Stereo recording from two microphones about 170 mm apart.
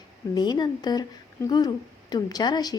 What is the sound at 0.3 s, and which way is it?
A woman's voice, 25° left (ahead or behind).